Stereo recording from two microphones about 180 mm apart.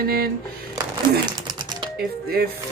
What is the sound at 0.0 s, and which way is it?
Speech, 60° right (ahead or behind).